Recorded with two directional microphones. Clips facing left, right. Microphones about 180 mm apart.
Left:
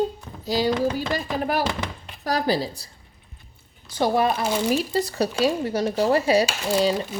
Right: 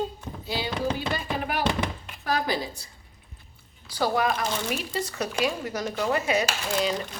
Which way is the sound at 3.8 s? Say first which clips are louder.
Left 4 dB; 20° left (ahead or behind).